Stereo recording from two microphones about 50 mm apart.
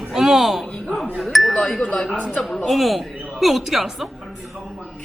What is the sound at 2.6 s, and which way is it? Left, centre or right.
A woman's voice, centre.